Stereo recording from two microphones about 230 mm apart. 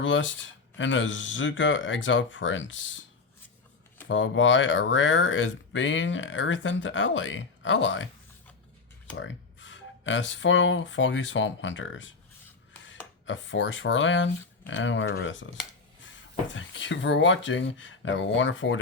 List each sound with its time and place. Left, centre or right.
0.0 s speech: left
4.1 s speech: left
9.1 s speech: left
16.6 s speech: left